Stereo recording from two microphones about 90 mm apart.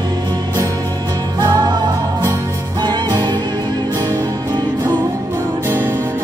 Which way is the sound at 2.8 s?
50° right (ahead or behind).